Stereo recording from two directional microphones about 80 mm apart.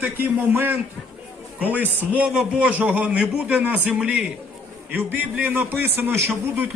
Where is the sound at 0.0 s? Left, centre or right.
Right.